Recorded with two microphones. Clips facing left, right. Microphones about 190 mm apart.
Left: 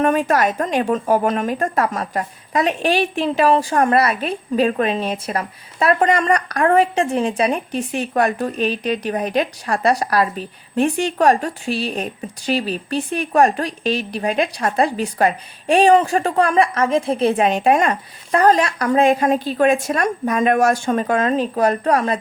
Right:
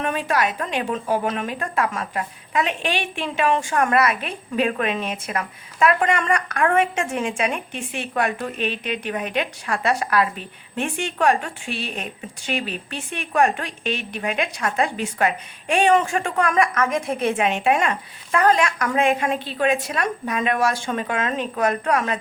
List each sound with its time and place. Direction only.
0.0 s a woman's voice: 45° left (ahead or behind)